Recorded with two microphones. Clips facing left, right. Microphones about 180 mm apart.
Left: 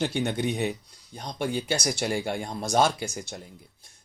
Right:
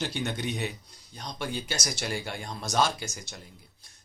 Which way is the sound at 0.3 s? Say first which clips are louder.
Left 5 dB; 55° left (ahead or behind).